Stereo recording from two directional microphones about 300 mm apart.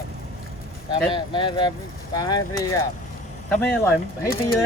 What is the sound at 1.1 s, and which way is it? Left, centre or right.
Speech, centre.